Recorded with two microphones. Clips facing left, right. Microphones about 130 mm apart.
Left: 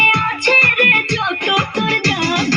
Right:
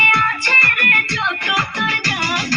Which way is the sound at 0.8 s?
50° left (ahead or behind).